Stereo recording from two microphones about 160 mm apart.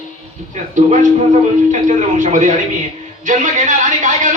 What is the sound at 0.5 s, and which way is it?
Speech, 50° right (ahead or behind).